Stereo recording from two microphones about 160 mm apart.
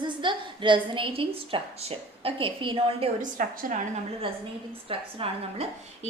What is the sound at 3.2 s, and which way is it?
Speech, 60° right (ahead or behind).